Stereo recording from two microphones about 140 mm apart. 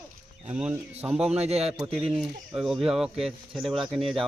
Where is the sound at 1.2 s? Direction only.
50° right (ahead or behind).